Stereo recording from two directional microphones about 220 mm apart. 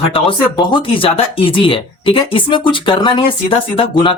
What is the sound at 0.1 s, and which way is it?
Speech, 20° left (ahead or behind).